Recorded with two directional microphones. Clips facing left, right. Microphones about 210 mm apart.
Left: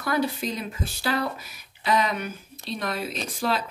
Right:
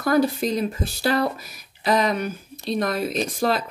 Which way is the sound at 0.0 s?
45° right (ahead or behind).